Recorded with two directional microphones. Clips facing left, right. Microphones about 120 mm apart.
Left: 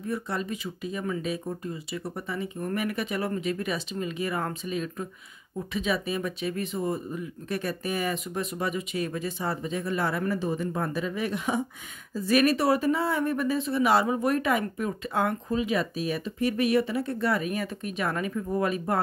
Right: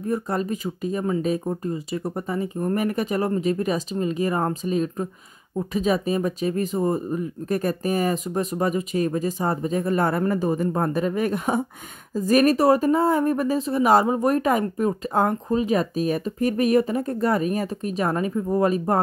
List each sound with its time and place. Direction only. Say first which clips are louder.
0.0 s speech: right 6 dB; 40° right (ahead or behind)